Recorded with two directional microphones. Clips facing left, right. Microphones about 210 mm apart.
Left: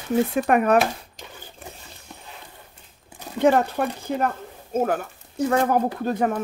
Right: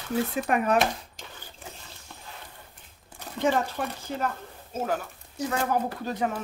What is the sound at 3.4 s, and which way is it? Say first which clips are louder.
Speech: left 7 dB; 60° left (ahead or behind).